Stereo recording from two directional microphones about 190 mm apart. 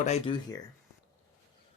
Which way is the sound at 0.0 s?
35° left (ahead or behind).